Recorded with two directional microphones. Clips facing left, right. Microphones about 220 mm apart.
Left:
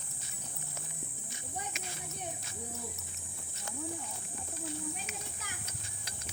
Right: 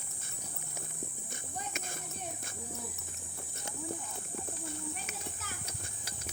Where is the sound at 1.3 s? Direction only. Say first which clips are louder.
Left 1 dB; 50° right (ahead or behind).